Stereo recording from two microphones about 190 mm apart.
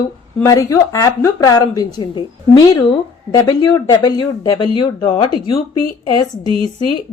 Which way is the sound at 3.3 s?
20° left (ahead or behind).